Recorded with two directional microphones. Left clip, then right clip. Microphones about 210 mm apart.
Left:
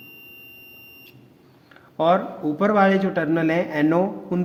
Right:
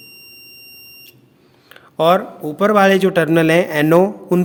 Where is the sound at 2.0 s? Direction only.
35° right (ahead or behind).